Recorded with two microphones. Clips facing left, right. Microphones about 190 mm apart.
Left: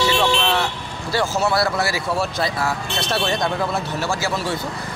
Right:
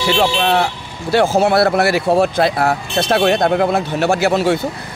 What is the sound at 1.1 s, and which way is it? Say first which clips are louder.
Speech: right 7 dB; 55° right (ahead or behind).